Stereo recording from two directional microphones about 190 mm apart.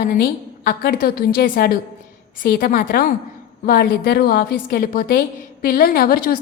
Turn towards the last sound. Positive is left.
turn(degrees=50)  # may be behind; listen again after turning